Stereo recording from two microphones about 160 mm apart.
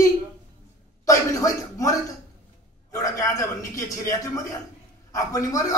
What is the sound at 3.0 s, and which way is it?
A man's voice, 20° left (ahead or behind).